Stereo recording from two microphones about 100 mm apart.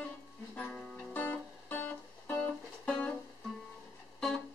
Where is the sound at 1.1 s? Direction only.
15° left (ahead or behind).